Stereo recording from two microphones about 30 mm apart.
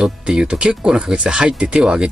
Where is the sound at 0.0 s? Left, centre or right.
Right.